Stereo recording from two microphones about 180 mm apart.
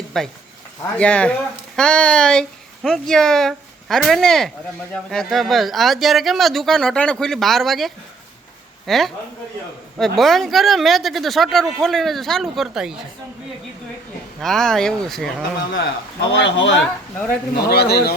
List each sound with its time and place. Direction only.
0.1 s speech: 5° left (ahead or behind)
14.4 s speech: centre (ahead or behind)
16.4 s speech: 90° left
16.7 s speech: 5° left (ahead or behind)
17.5 s speech: 65° left (ahead or behind)